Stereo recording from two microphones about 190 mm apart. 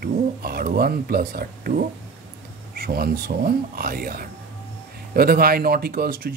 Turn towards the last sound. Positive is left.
turn(degrees=-55)  # may be behind; listen again after turning